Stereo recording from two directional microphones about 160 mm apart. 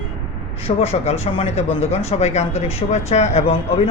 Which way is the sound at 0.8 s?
40° left (ahead or behind).